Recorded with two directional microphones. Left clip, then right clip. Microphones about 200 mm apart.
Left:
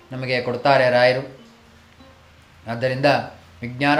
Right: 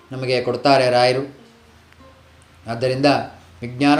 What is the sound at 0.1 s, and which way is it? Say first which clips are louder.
Speech: right 3 dB; 15° right (ahead or behind).